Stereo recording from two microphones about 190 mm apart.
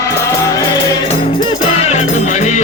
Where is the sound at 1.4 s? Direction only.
35° left (ahead or behind).